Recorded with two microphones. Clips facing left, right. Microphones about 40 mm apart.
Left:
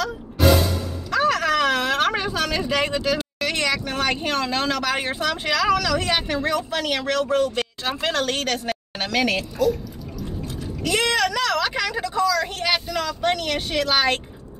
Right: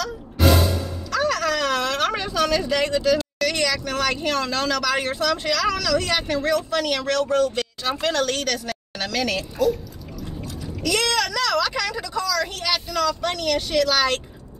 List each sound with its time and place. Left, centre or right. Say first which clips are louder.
1.1 s speech: left 2 dB; left
10.8 s speech: left 1 dB; left